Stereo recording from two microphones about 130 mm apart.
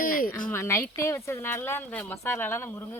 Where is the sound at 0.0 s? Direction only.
90° left.